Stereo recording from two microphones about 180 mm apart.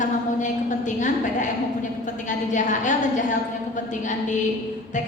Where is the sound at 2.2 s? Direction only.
45° left (ahead or behind).